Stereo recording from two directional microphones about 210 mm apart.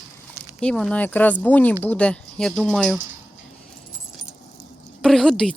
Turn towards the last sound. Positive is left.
turn(degrees=0)  # may be behind; listen again after turning